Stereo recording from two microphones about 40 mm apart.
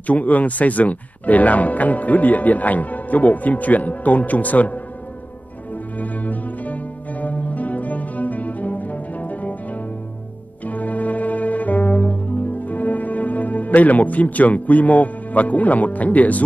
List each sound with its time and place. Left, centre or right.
0.0 s speech: left
5.9 s music: left
10.6 s music: left